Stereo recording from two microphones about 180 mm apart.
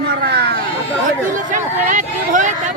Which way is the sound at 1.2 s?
45° right (ahead or behind).